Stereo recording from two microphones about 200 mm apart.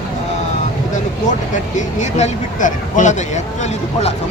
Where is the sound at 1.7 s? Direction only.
35° left (ahead or behind).